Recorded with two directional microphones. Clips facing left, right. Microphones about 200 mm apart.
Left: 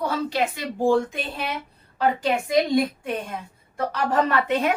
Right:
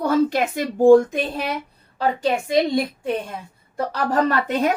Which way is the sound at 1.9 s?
30° right (ahead or behind).